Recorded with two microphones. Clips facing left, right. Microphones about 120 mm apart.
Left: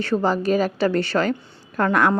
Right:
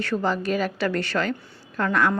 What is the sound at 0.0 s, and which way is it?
A woman's voice, 30° left (ahead or behind).